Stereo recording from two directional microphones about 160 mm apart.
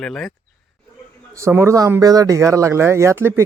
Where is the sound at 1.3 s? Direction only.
15° right (ahead or behind).